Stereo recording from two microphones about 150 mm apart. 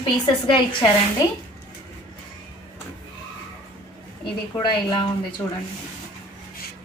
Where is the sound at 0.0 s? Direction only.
30° left (ahead or behind).